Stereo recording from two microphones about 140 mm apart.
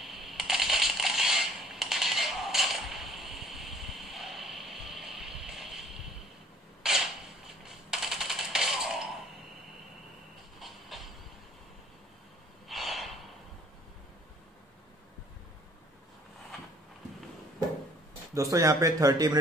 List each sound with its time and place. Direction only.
0.0 s coin: centre (ahead or behind)
6.8 s a sound: 5° right (ahead or behind)
10.9 s vehicle: centre (ahead or behind)
12.6 s snort: centre (ahead or behind)
18.3 s speech: 25° right (ahead or behind)